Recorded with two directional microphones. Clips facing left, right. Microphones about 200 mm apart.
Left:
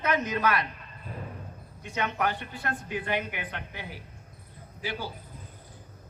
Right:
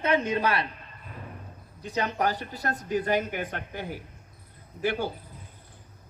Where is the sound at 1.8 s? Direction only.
35° right (ahead or behind); by 5.1 s 50° right (ahead or behind).